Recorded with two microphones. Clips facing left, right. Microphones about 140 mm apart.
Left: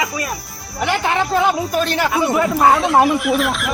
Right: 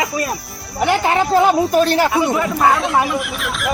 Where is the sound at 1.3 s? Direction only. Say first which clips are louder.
Right 6 dB; 30° right (ahead or behind).